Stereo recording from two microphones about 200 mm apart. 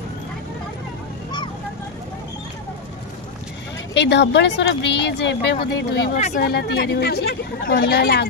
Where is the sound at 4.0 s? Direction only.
60° left (ahead or behind).